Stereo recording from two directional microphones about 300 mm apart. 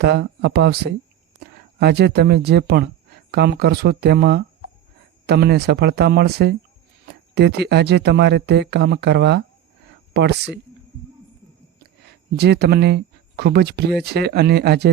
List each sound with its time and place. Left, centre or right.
0.0 s speech: right
12.4 s speech: right